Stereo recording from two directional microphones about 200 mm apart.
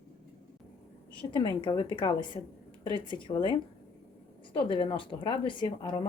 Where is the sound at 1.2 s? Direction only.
20° left (ahead or behind).